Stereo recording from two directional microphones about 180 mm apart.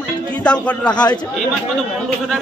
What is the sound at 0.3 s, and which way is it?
Speech, 5° left (ahead or behind).